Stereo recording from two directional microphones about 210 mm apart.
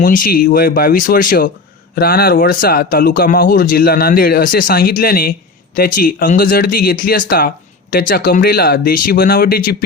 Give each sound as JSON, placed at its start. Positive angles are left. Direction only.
{"t": 0.0, "sound": "speech", "side_deg": 40}